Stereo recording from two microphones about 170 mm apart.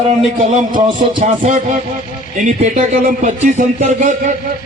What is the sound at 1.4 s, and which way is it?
A man's voice, 50° right (ahead or behind).